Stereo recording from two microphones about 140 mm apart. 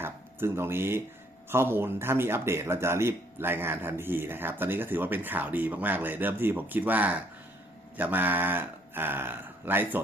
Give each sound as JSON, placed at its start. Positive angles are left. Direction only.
{"t": 0.0, "sound": "a man's voice", "side_deg": -15}